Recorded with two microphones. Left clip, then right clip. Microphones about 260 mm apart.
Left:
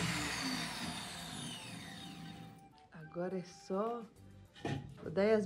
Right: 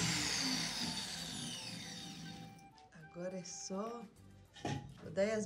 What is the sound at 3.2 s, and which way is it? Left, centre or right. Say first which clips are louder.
Speech: left 2 dB; centre.